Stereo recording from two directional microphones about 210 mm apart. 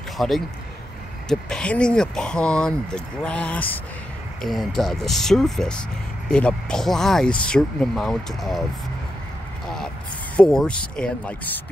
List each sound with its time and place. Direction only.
0.2 s speech: centre (ahead or behind)
10.3 s speech: 5° left (ahead or behind)